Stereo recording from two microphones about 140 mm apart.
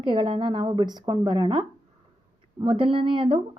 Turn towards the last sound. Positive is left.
turn(degrees=-40)  # may be behind; listen again after turning